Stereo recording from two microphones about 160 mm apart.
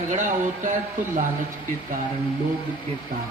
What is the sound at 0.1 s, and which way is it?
Speech, 55° right (ahead or behind).